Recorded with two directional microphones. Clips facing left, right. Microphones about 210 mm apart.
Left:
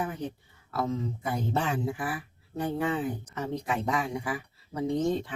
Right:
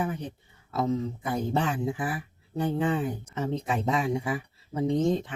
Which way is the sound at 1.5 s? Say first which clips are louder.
Right 2 dB; 20° right (ahead or behind).